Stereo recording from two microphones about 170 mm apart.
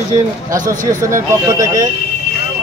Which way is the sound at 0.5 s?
50° right (ahead or behind).